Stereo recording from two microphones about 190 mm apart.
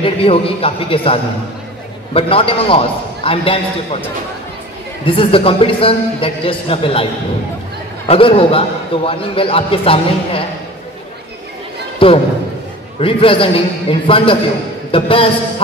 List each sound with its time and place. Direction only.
0.0 s a man's voice: 30° left (ahead or behind)
5.0 s a man's voice: 30° left (ahead or behind)
8.1 s a man's voice: 30° left (ahead or behind)
12.0 s a man's voice: 30° left (ahead or behind)